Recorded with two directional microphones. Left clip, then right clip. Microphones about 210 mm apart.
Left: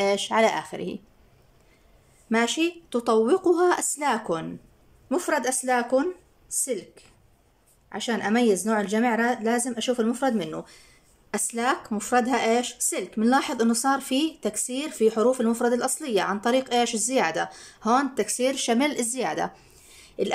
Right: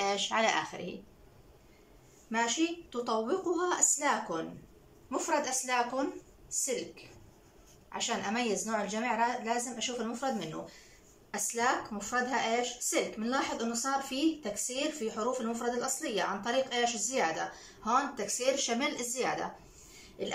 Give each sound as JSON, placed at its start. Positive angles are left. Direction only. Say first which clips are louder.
{"t": 0.0, "sound": "speech", "louder": "left 8 dB", "side_deg": 35}
{"t": 2.2, "sound": "a woman's voice", "louder": "left 7 dB", "side_deg": 50}
{"t": 7.9, "sound": "a woman's voice", "louder": "left 8 dB", "side_deg": 55}